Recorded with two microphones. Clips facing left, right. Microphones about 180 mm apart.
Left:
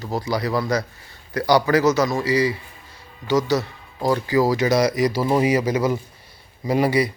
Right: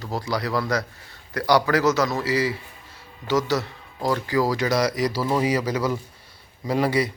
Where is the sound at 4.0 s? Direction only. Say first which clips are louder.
Left 3 dB; 20° left (ahead or behind).